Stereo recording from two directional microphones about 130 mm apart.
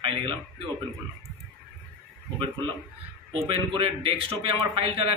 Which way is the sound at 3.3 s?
45° right (ahead or behind).